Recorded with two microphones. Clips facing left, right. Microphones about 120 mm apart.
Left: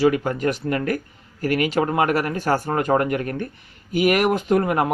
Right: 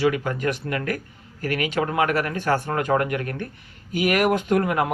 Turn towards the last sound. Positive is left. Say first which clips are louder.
# left 2 dB
turn(degrees=45)  # may be behind; listen again after turning